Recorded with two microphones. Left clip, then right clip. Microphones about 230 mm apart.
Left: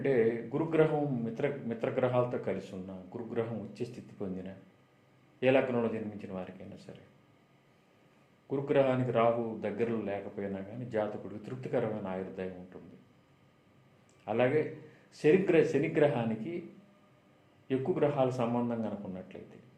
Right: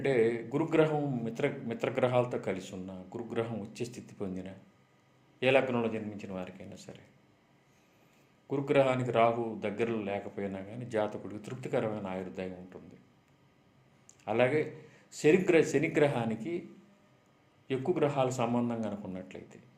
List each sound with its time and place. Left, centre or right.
0.0 s a man's voice: right
8.4 s a man's voice: right
14.3 s a man's voice: right
17.7 s a man's voice: right